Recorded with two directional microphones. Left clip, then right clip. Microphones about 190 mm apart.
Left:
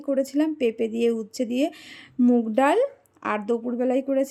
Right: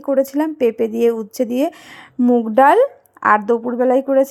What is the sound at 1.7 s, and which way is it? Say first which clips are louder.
A woman's voice: right 7 dB; 5° right (ahead or behind).